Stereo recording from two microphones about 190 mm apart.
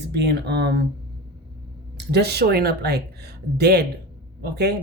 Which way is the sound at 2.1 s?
60° right (ahead or behind).